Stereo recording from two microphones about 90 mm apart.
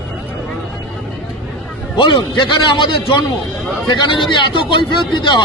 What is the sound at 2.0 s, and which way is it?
A man's voice, 60° left (ahead or behind).